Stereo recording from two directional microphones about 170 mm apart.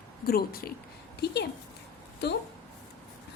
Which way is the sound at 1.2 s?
75° left (ahead or behind).